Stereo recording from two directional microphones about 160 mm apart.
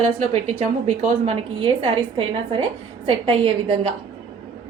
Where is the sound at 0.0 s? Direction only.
45° right (ahead or behind).